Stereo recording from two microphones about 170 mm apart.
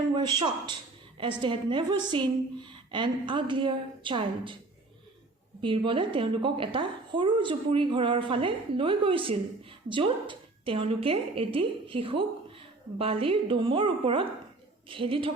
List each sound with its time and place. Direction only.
0.1 s a woman's voice: 30° right (ahead or behind)
5.6 s a woman's voice: 30° right (ahead or behind)